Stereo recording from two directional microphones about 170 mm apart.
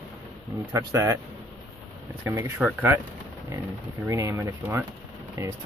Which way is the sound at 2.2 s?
15° right (ahead or behind).